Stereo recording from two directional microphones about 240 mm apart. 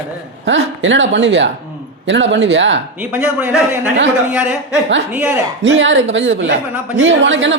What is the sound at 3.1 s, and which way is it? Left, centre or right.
A man's voice, centre.